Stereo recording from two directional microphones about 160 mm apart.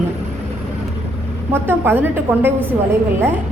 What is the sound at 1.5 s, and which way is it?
A woman's voice, 15° right (ahead or behind).